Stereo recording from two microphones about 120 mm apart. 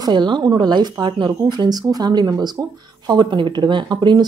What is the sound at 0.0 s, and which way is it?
Speech, 40° right (ahead or behind).